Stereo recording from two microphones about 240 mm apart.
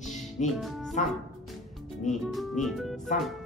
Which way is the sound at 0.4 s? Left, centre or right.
Left.